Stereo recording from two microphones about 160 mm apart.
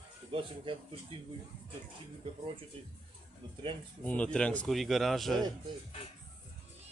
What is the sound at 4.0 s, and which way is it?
A man's voice, 10° left (ahead or behind).